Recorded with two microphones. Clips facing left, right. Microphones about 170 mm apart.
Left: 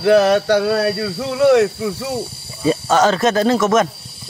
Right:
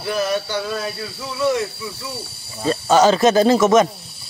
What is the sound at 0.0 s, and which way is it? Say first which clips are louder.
Speech: left 9 dB; 75° left (ahead or behind).